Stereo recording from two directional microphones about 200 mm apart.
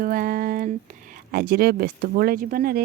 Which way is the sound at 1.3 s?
50° right (ahead or behind).